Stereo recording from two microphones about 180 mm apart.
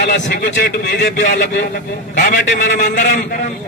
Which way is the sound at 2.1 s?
45° left (ahead or behind).